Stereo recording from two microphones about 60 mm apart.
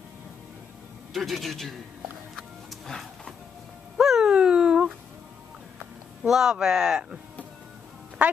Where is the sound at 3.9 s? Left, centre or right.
Centre.